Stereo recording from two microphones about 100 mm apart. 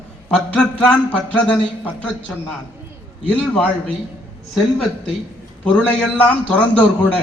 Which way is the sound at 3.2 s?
10° left (ahead or behind).